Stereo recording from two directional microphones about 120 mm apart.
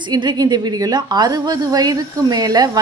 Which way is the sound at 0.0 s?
40° right (ahead or behind).